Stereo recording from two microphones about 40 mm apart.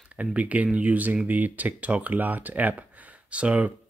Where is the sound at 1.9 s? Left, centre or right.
Right.